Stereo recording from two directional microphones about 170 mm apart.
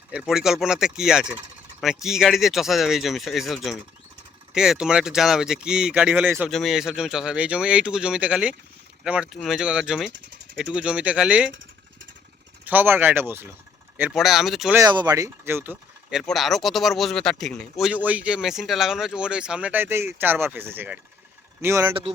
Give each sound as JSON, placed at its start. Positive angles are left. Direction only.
{"t": 0.1, "sound": "speech", "side_deg": -5}
{"t": 6.5, "sound": "speech", "side_deg": 0}
{"t": 12.6, "sound": "speech", "side_deg": -10}
{"t": 14.8, "sound": "speech", "side_deg": -25}